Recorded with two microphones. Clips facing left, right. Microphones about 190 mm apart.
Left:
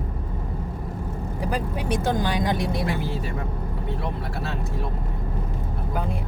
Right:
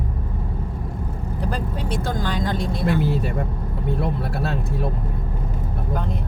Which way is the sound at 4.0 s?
55° right (ahead or behind).